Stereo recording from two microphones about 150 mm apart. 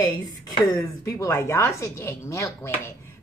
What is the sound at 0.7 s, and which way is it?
Speech, 25° left (ahead or behind).